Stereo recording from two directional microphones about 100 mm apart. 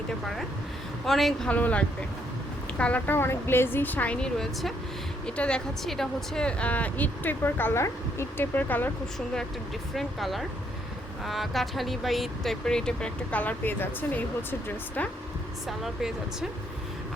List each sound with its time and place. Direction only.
1.0 s speech: centre (ahead or behind)
1.5 s speech: 15° left (ahead or behind)
9.1 s speech: 5° left (ahead or behind)
15.6 s speech: 5° right (ahead or behind)